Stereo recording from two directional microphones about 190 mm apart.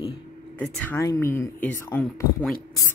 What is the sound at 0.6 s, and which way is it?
Speech, 5° left (ahead or behind).